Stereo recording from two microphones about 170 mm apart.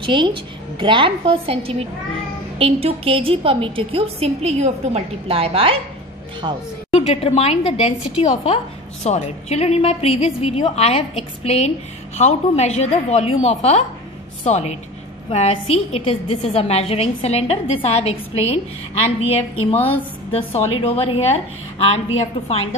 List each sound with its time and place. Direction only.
0.0 s a woman's voice: 30° right (ahead or behind)
6.9 s a woman's voice: 35° left (ahead or behind)
9.0 s a woman's voice: 40° left (ahead or behind)
20.3 s a woman's voice: 35° left (ahead or behind)